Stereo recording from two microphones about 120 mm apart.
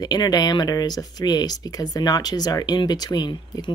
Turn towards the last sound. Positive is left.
turn(degrees=40)  # may be behind; listen again after turning